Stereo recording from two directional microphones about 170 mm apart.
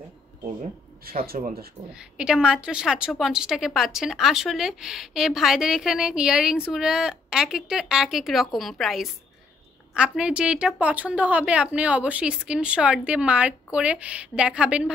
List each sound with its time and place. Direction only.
1.0 s speech: 60° right (ahead or behind)
2.0 s a woman's voice: 5° right (ahead or behind)